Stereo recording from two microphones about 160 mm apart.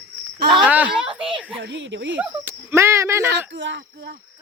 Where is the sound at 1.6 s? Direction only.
90° right.